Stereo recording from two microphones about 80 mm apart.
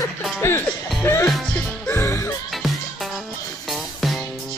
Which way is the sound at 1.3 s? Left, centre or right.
Centre.